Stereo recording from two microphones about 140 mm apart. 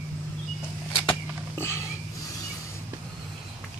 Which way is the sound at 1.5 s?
20° left (ahead or behind).